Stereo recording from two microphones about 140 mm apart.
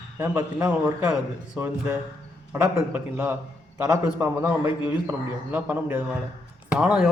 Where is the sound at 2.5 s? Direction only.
15° right (ahead or behind).